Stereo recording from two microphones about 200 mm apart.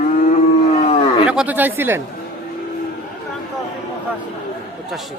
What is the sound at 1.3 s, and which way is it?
Speech, 5° right (ahead or behind).